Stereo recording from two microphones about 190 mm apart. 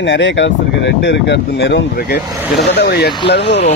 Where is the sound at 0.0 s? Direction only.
70° left (ahead or behind).